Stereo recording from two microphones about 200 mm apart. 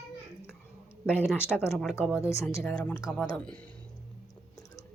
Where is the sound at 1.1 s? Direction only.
10° left (ahead or behind).